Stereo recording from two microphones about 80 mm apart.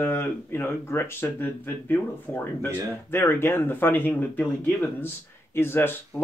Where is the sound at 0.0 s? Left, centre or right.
Left.